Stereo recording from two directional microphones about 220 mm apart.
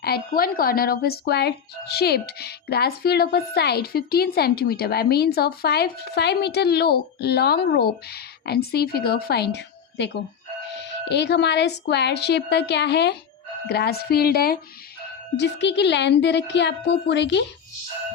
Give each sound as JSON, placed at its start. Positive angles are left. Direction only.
{"t": 0.0, "sound": "speech", "side_deg": 45}